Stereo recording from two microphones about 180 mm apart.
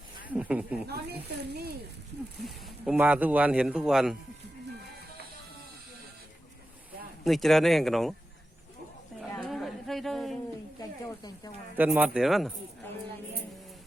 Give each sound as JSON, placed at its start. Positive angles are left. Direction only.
{"t": 0.3, "sound": "speech", "side_deg": -10}
{"t": 0.9, "sound": "speech", "side_deg": -60}
{"t": 2.4, "sound": "speech", "side_deg": -5}
{"t": 7.3, "sound": "speech", "side_deg": 0}
{"t": 9.5, "sound": "a sound", "side_deg": 0}
{"t": 10.8, "sound": "speech", "side_deg": 20}
{"t": 11.8, "sound": "speech", "side_deg": -10}
{"t": 12.8, "sound": "a sound", "side_deg": 10}